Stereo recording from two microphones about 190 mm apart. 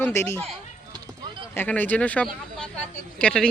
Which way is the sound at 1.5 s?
10° left (ahead or behind).